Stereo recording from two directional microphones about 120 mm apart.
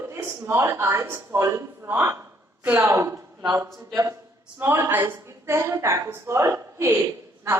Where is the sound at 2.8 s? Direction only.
25° right (ahead or behind).